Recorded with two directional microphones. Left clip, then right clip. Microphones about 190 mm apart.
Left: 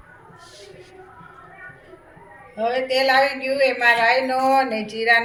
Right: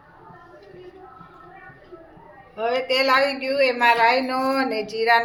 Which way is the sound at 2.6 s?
50° right (ahead or behind).